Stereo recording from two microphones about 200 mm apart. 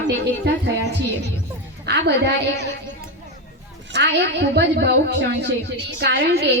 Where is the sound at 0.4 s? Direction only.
55° right (ahead or behind).